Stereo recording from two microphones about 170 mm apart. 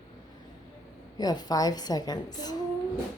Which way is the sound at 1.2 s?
25° left (ahead or behind).